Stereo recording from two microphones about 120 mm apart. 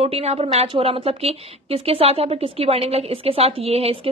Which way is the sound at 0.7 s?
50° right (ahead or behind).